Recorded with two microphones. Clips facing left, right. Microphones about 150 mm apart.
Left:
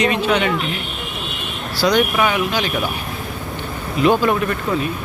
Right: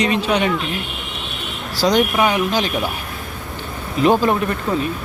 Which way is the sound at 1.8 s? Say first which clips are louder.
Right 1 dB; 35° right (ahead or behind).